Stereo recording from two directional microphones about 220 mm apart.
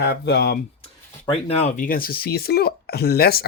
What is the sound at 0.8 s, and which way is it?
Speech, 25° left (ahead or behind).